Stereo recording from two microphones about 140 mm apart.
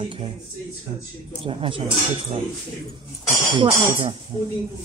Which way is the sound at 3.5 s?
35° right (ahead or behind).